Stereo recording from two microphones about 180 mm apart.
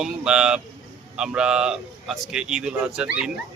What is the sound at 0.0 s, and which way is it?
Speech, 5° right (ahead or behind).